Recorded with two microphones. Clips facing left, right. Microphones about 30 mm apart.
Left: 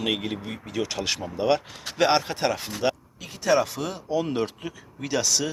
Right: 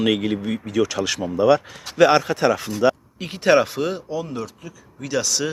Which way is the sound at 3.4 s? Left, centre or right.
Right.